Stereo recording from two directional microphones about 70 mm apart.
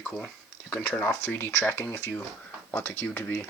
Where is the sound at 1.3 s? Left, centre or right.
Left.